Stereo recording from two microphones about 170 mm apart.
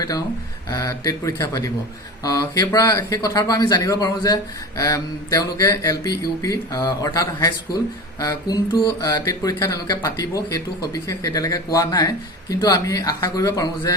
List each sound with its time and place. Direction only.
0.7 s speech: 20° left (ahead or behind)